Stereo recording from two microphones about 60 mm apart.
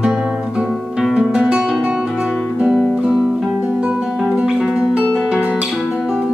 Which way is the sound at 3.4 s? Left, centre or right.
Right.